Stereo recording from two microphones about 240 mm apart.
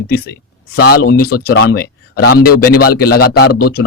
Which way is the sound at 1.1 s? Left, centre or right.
Left.